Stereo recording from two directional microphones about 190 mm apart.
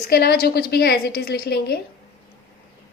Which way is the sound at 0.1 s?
55° left (ahead or behind).